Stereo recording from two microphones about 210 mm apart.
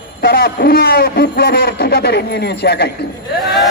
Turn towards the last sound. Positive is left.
turn(degrees=0)  # may be behind; listen again after turning